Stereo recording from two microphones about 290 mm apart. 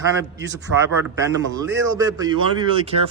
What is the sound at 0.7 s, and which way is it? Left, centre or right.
Speech, right.